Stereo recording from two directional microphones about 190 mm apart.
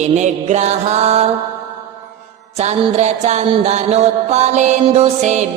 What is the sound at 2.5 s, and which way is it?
Music, 35° right (ahead or behind).